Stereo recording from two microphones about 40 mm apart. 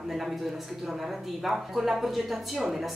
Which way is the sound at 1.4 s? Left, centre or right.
Centre.